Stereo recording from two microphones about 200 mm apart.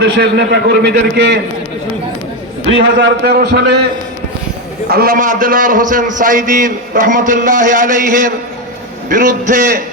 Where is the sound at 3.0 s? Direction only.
55° right (ahead or behind).